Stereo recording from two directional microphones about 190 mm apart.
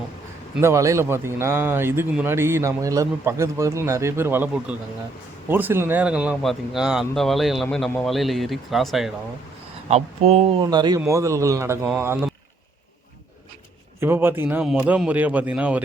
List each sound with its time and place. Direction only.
0.5 s speech: 15° right (ahead or behind)
9.9 s speech: 35° right (ahead or behind)
10.6 s speech: 20° right (ahead or behind)
14.0 s speech: 10° right (ahead or behind)